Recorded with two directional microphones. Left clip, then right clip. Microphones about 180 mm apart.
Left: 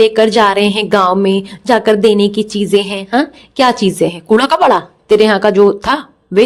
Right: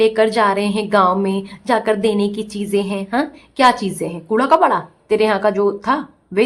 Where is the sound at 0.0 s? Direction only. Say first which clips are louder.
Left 5 dB; 30° left (ahead or behind).